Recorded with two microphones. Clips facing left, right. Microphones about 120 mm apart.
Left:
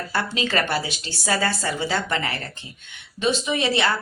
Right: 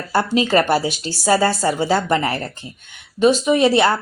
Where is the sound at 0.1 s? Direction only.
40° right (ahead or behind).